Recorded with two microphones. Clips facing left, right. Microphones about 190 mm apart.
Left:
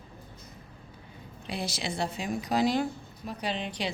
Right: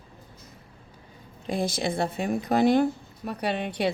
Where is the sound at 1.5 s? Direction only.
50° right (ahead or behind).